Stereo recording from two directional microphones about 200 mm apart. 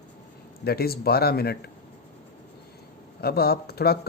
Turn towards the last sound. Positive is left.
turn(degrees=50)  # may be behind; listen again after turning